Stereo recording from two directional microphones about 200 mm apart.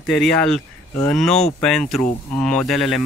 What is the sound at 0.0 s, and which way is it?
Speech, 5° left (ahead or behind).